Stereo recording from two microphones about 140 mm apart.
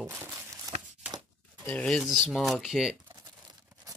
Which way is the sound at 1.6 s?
10° left (ahead or behind).